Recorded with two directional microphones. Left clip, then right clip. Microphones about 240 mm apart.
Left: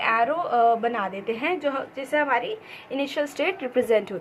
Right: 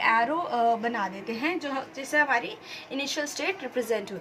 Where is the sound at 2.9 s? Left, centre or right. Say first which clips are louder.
Left 4 dB; left.